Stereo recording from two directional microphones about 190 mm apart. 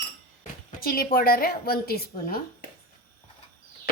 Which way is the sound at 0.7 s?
50° left (ahead or behind).